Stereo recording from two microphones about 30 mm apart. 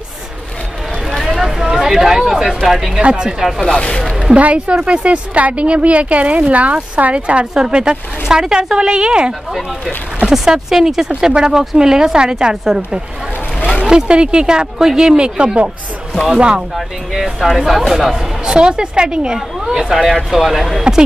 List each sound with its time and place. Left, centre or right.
1.0 s a sound: centre
2.1 s speech: centre
3.2 s speech: right
3.6 s speech: left
4.4 s speech: right
7.5 s speech: right
8.7 s speech: right
10.3 s speech: centre
11.1 s speech: right
16.7 s speech: centre
17.9 s speech: centre
18.4 s speech: right
19.6 s speech: centre
20.3 s speech: centre